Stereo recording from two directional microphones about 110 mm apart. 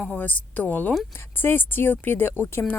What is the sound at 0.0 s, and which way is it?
Speech, 15° left (ahead or behind).